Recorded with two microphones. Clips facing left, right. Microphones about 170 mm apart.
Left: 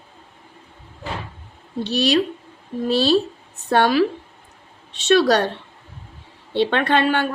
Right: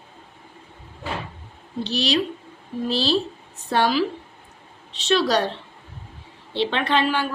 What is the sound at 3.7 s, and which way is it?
Speech, 60° left (ahead or behind).